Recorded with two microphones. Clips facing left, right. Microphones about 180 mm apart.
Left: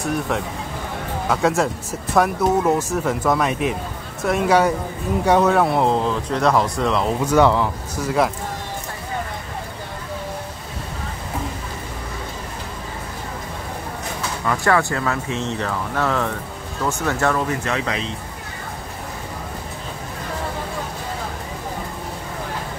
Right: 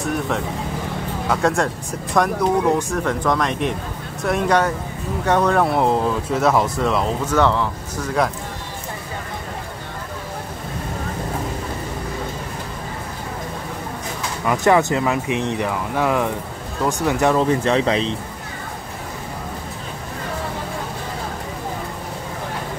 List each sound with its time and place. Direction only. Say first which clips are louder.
0.0 s speech: even; centre (ahead or behind)
7.2 s speech: left 4 dB; 10° left (ahead or behind)
14.4 s speech: right 3 dB; 15° right (ahead or behind)
17.4 s speech: right 6 dB; 30° right (ahead or behind)